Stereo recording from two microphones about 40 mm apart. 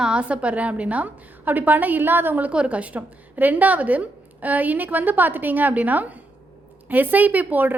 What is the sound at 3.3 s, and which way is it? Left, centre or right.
A woman's voice, right.